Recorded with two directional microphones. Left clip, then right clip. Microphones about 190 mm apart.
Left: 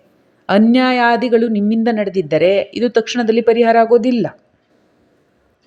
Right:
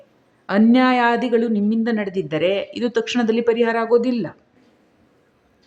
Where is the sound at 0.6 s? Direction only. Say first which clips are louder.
Left 1 dB; 15° left (ahead or behind).